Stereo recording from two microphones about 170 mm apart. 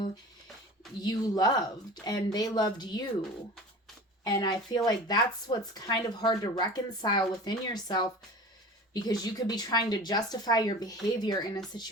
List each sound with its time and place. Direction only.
1.0 s speech: 25° left (ahead or behind)
4.2 s speech: 25° left (ahead or behind)